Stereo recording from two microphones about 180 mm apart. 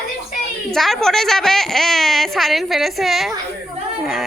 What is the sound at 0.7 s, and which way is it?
Speech, centre (ahead or behind).